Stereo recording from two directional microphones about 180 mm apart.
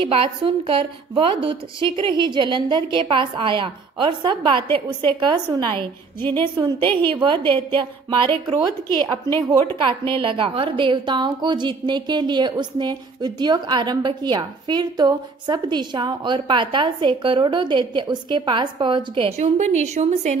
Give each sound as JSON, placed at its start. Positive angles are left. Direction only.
{"t": 0.0, "sound": "a woman's voice", "side_deg": -30}
{"t": 9.8, "sound": "a woman's voice", "side_deg": -30}